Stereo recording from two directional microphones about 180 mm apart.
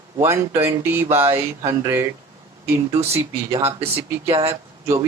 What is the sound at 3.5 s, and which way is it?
Speech, 35° right (ahead or behind).